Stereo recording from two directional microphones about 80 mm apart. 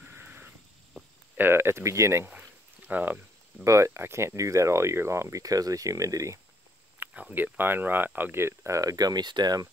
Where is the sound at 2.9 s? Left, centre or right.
Right.